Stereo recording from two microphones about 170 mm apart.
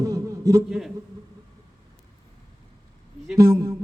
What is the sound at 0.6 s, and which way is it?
Speech, centre (ahead or behind).